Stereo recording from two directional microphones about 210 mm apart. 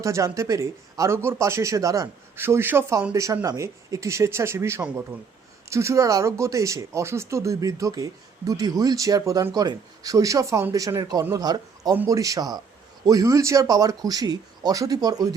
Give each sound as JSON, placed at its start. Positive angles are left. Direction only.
{"t": 0.0, "sound": "speech", "side_deg": -15}